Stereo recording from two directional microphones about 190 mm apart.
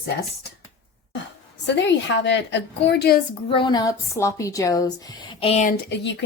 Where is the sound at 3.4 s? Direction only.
25° left (ahead or behind).